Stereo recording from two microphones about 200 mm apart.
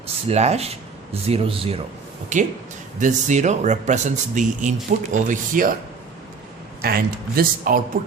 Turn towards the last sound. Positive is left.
turn(degrees=-45)  # may be behind; listen again after turning